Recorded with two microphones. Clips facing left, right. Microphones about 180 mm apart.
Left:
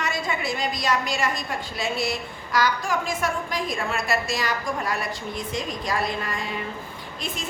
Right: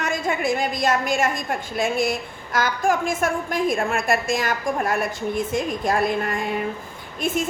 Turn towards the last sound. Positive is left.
turn(degrees=-55)  # may be behind; listen again after turning